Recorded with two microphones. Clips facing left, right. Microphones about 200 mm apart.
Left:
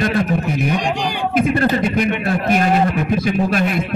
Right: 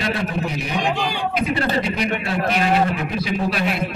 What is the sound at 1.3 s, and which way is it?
A man's voice, 50° left (ahead or behind).